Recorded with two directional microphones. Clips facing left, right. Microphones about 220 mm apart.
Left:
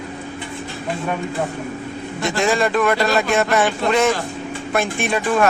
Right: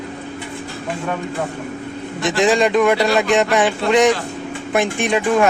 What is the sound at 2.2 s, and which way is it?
Speech, 20° right (ahead or behind).